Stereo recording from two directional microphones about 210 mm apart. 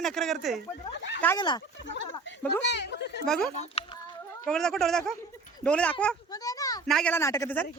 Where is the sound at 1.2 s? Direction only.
20° left (ahead or behind).